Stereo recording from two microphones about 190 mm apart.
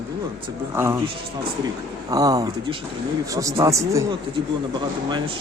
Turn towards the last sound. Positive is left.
turn(degrees=-15)  # may be behind; listen again after turning